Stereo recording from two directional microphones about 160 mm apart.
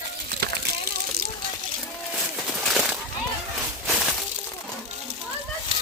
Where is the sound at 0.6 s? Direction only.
80° right.